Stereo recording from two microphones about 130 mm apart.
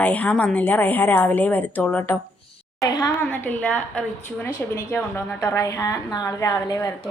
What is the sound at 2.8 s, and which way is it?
Speech, 35° left (ahead or behind).